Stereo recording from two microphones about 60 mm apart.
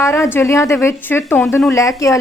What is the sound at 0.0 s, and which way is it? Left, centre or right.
A woman's voice, left.